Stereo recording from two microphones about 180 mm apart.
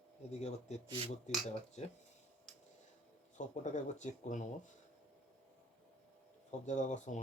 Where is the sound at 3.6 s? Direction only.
45° left (ahead or behind).